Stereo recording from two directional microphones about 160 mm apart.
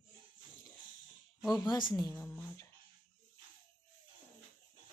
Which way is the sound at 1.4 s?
Centre (ahead or behind).